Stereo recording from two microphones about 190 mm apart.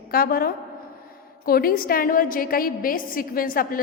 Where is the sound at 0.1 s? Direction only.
50° left (ahead or behind).